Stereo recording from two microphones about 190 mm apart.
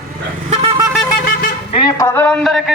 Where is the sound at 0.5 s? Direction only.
30° right (ahead or behind).